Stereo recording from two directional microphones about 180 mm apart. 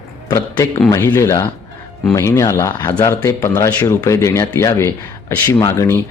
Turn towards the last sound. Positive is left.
turn(degrees=15)  # may be behind; listen again after turning